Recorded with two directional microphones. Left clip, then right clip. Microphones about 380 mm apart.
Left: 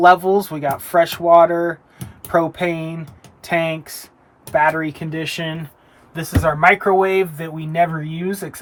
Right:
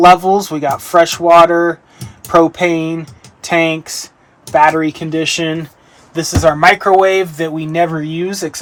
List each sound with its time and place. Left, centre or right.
0.0 s speech: centre
6.1 s speech: right